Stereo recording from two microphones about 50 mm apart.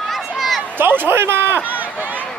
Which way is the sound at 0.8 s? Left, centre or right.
Right.